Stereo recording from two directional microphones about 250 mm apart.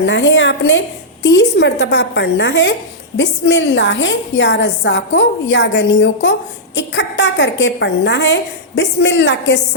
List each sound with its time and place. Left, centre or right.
0.0 s a woman's voice: left